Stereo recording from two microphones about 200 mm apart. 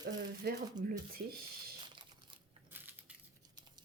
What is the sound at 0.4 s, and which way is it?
Speech, 50° right (ahead or behind).